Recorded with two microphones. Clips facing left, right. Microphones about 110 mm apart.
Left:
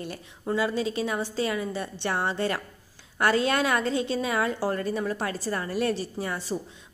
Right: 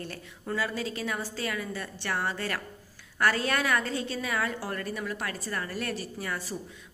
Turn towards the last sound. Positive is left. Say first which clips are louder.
# left 4 dB
turn(degrees=25)  # may be behind; listen again after turning